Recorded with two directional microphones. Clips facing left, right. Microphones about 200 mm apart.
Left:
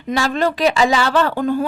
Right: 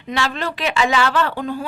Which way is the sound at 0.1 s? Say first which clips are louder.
Left 5 dB; 40° left (ahead or behind).